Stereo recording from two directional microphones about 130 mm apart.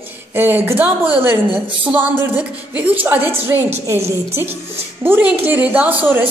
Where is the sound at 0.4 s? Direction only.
15° right (ahead or behind).